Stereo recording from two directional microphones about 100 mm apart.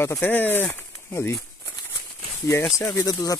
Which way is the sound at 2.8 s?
30° left (ahead or behind).